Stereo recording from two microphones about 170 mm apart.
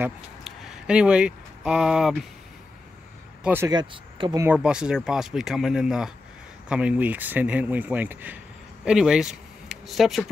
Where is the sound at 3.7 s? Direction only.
25° right (ahead or behind).